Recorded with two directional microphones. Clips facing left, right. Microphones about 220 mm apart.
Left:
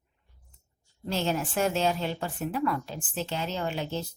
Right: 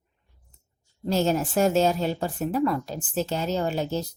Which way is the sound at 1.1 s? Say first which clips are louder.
Right 6 dB; 40° right (ahead or behind).